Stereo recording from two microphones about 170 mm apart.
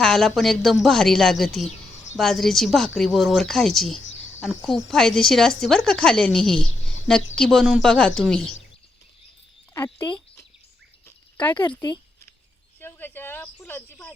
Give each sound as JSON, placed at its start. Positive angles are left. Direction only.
{"t": 0.0, "sound": "speech", "side_deg": 0}
{"t": 11.8, "sound": "a sound", "side_deg": 25}
{"t": 12.8, "sound": "speech", "side_deg": 10}